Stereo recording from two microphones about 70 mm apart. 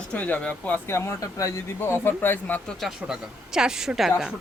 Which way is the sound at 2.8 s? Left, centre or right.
Centre.